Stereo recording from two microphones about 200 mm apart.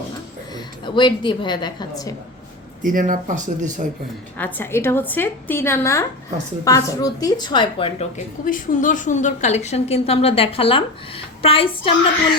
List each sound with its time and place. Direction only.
0.5 s a woman's voice: 25° left (ahead or behind)
2.8 s speech: 40° right (ahead or behind)
4.4 s a woman's voice: 10° left (ahead or behind); by 11.9 s 25° left (ahead or behind)